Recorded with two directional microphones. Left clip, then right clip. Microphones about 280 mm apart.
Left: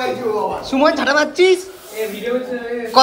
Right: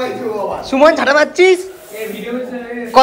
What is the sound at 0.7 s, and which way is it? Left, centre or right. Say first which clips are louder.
Speech: right 5 dB; centre.